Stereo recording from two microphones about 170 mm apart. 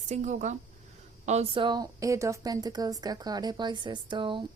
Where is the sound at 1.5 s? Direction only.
25° right (ahead or behind).